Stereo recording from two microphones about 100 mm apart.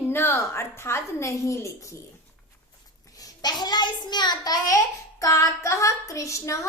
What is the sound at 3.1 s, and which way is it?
A child's voice, 40° left (ahead or behind).